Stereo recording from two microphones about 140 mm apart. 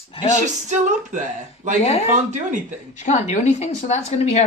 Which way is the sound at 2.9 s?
55° left (ahead or behind).